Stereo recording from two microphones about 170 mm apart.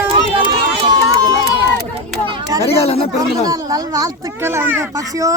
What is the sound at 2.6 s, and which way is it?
Speech, 35° left (ahead or behind).